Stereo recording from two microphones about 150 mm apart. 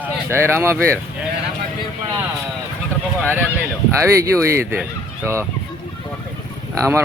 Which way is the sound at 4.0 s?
20° right (ahead or behind).